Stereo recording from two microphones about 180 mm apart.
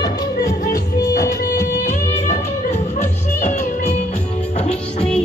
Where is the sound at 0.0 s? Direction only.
20° left (ahead or behind).